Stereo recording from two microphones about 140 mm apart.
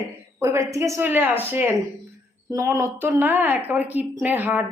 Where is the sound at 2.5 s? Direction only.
20° right (ahead or behind).